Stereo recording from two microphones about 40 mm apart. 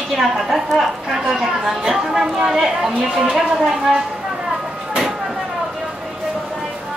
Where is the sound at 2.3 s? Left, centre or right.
Centre.